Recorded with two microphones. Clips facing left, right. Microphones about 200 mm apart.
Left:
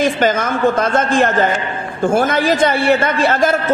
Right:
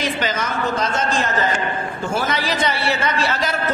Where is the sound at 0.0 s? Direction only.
50° left (ahead or behind).